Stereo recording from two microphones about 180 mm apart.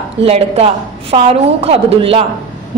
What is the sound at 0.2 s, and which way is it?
A woman's voice, 35° right (ahead or behind).